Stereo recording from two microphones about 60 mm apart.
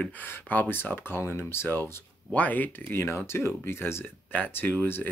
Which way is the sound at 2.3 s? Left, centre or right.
Left.